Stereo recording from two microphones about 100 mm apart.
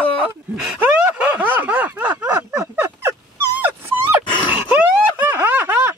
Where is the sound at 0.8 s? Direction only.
20° right (ahead or behind).